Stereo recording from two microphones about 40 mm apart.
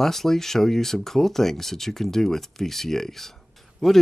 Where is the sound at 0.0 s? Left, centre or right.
Centre.